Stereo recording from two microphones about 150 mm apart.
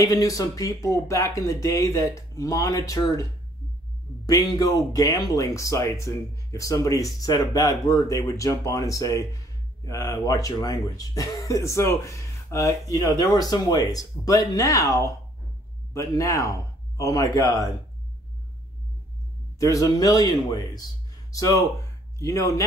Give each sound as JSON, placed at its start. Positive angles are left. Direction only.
{"t": 0.0, "sound": "speech", "side_deg": 25}
{"t": 4.3, "sound": "speech", "side_deg": 25}
{"t": 19.6, "sound": "speech", "side_deg": 20}